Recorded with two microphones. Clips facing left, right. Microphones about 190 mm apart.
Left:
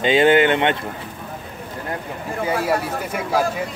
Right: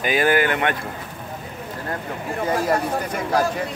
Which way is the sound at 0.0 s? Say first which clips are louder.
Left 5 dB; 25° left (ahead or behind).